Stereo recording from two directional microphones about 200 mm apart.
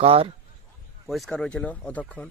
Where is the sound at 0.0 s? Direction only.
30° right (ahead or behind).